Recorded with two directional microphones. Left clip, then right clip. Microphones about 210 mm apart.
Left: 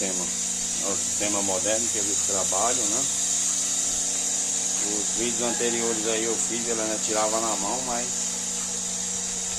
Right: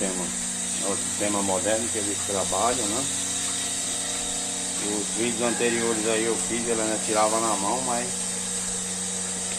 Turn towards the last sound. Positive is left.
turn(degrees=0)  # may be behind; listen again after turning